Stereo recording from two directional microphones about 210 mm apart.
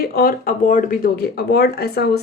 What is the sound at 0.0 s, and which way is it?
A woman's voice, 45° left (ahead or behind).